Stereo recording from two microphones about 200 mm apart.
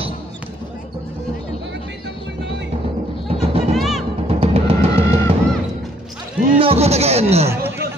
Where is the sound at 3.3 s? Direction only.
30° right (ahead or behind).